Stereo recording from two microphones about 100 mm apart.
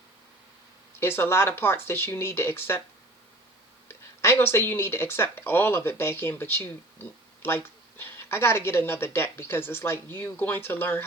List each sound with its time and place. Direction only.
0.9 s speech: 25° left (ahead or behind)
3.8 s speech: 25° left (ahead or behind)